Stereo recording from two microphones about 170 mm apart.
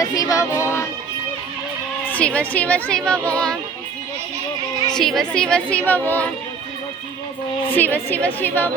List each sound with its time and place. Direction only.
0.0 s child singing: 20° left (ahead or behind)
2.0 s speech: 10° left (ahead or behind)
4.9 s speech: centre (ahead or behind)
7.8 s speech: 10° left (ahead or behind)